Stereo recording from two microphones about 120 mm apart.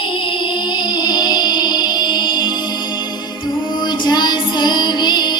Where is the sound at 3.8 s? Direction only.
40° left (ahead or behind).